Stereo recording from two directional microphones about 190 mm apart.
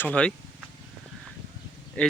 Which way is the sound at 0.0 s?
5° left (ahead or behind).